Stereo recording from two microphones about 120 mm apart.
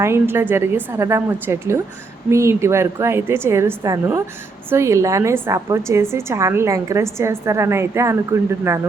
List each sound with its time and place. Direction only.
0.0 s a woman's voice: 20° right (ahead or behind)